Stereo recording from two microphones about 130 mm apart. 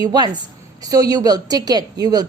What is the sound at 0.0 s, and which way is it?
A woman's voice, 30° right (ahead or behind).